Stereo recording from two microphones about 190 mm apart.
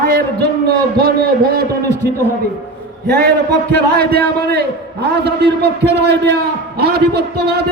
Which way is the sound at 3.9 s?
55° right (ahead or behind).